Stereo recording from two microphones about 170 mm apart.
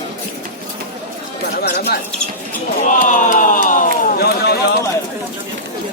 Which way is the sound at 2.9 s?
50° left (ahead or behind).